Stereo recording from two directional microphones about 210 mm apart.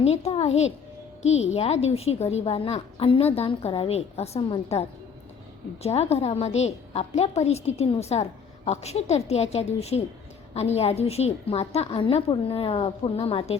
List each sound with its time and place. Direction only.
0.0 s a woman's voice: 30° left (ahead or behind)